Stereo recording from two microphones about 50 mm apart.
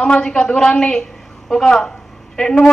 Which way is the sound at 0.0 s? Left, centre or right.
Centre.